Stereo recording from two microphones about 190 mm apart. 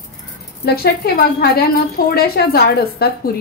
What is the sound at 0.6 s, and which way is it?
A woman's voice, 55° left (ahead or behind).